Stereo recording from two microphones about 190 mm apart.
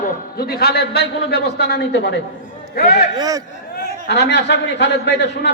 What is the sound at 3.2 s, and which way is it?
Speech, 20° right (ahead or behind).